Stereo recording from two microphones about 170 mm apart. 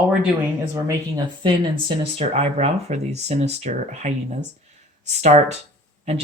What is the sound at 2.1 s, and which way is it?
Speech, 40° right (ahead or behind).